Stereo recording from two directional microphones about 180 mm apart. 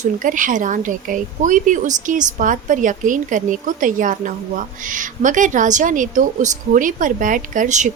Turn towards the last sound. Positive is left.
turn(degrees=-45)  # may be behind; listen again after turning